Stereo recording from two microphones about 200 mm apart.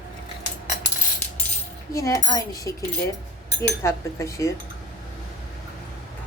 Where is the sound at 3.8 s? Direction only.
15° left (ahead or behind).